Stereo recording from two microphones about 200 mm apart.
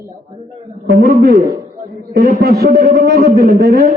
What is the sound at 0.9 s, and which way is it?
A man's voice, 40° right (ahead or behind).